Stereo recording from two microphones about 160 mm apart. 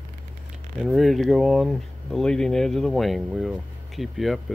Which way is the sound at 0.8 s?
Centre (ahead or behind).